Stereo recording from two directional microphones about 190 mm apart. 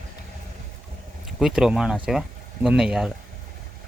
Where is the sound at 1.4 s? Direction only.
5° right (ahead or behind).